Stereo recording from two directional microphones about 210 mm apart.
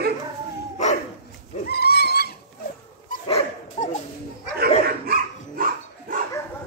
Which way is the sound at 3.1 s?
35° left (ahead or behind).